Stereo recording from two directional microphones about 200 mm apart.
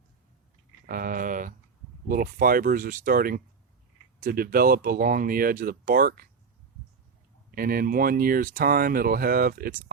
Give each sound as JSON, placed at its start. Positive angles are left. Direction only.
{"t": 0.9, "sound": "speech", "side_deg": -45}
{"t": 7.5, "sound": "speech", "side_deg": -45}